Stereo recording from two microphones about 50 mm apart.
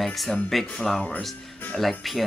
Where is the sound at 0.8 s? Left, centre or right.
Centre.